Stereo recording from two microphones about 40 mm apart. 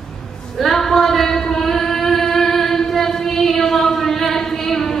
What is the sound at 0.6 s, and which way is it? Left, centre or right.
Singing, centre.